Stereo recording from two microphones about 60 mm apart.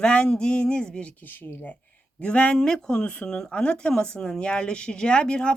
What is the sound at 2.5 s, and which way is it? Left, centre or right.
Speech, centre.